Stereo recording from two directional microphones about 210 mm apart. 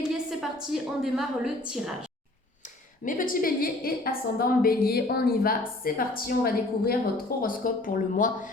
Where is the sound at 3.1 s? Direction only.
40° left (ahead or behind).